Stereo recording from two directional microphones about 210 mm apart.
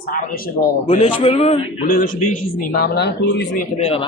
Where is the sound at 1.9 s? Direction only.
40° left (ahead or behind).